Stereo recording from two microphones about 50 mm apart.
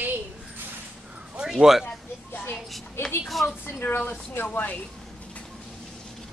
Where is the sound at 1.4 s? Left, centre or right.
Centre.